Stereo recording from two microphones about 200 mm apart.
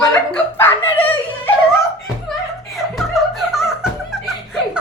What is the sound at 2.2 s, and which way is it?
Music, centre (ahead or behind).